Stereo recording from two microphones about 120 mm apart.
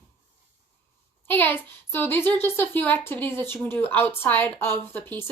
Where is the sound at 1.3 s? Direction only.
15° left (ahead or behind).